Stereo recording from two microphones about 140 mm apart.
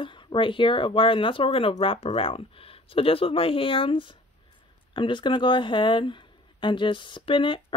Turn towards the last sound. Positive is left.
turn(degrees=35)  # may be behind; listen again after turning